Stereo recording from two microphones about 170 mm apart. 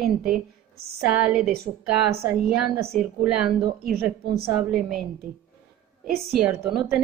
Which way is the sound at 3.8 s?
65° right (ahead or behind).